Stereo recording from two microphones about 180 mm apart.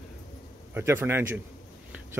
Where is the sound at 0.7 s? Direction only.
15° right (ahead or behind).